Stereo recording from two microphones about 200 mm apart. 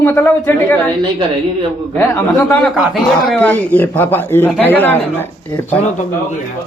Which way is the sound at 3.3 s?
10° left (ahead or behind).